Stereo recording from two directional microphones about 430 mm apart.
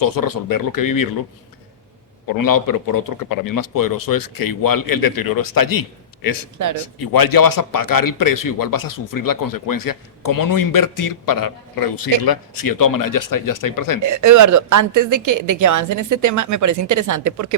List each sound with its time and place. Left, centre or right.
0.0 s a man's voice: left
2.2 s a man's voice: left
14.0 s a woman's voice: right